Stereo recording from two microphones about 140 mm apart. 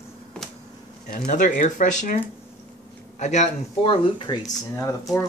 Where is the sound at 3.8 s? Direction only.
40° left (ahead or behind).